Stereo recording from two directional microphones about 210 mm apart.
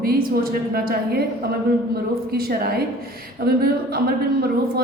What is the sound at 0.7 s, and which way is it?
Speech, 45° right (ahead or behind).